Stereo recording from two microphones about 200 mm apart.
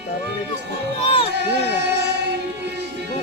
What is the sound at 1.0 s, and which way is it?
Speech, 25° left (ahead or behind).